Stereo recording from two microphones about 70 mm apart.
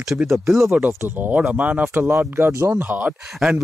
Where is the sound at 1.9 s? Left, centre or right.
Right.